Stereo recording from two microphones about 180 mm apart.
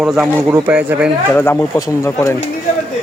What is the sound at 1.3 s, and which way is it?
Speech, 10° left (ahead or behind).